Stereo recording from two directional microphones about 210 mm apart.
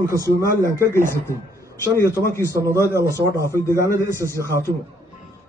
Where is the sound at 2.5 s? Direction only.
15° right (ahead or behind).